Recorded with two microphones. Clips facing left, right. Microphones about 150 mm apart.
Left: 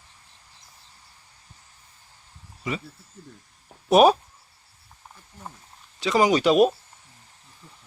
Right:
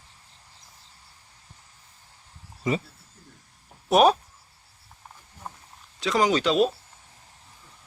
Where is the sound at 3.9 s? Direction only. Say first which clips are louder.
Left 2 dB; 5° left (ahead or behind).